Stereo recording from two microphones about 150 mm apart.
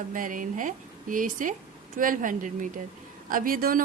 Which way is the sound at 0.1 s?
60° right (ahead or behind).